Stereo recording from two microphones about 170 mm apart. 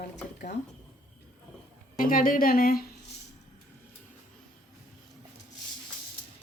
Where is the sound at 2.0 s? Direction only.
55° left (ahead or behind).